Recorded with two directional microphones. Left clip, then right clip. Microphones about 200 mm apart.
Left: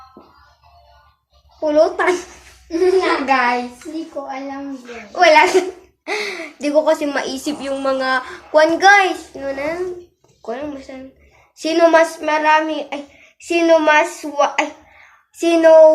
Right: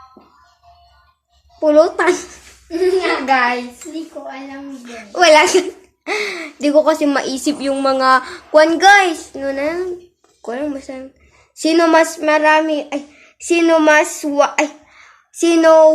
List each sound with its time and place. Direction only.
1.6 s speech: 50° right (ahead or behind)
3.2 s a child's voice: 15° right (ahead or behind)
4.9 s speech: 50° right (ahead or behind)